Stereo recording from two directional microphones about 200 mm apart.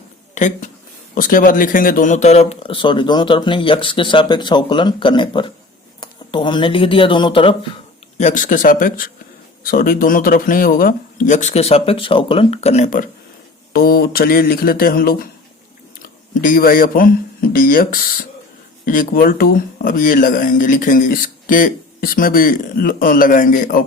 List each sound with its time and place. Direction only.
0.3 s speech: 40° left (ahead or behind)
8.2 s speech: 40° left (ahead or behind)
16.3 s speech: 40° left (ahead or behind)